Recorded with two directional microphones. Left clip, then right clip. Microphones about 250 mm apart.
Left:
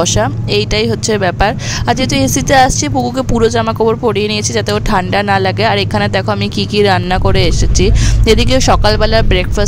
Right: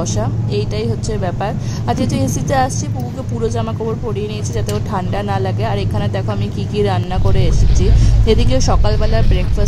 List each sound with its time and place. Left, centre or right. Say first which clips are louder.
0.0 s speech: left 9 dB; left